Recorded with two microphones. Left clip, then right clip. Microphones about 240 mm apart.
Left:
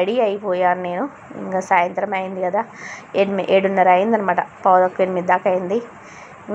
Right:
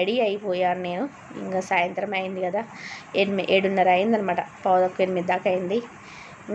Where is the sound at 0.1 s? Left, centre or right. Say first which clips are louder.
Left 5 dB; left.